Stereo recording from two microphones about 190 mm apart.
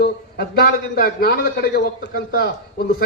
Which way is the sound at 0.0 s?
55° left (ahead or behind).